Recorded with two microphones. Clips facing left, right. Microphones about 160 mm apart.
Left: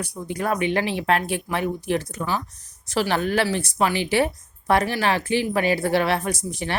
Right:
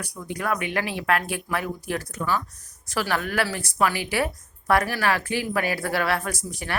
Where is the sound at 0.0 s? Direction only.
25° left (ahead or behind).